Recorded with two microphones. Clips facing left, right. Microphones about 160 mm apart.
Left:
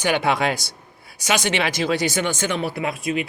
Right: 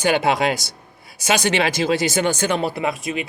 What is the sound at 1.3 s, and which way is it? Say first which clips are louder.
Speech: right 3 dB; 35° right (ahead or behind).